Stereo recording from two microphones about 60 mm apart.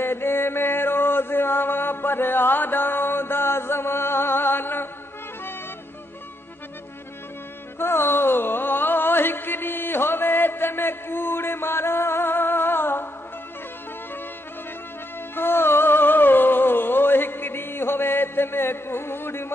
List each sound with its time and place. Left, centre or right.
0.0 s mantra: left
7.8 s a sound: left
15.3 s music: left